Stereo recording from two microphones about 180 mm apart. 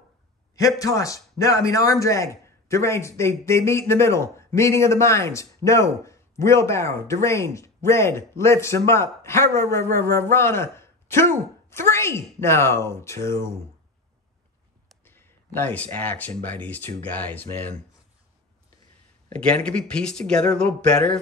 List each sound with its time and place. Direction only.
0.6 s a man's voice: 20° left (ahead or behind)
15.0 s a man's voice: 10° left (ahead or behind)
19.2 s speech: 5° left (ahead or behind)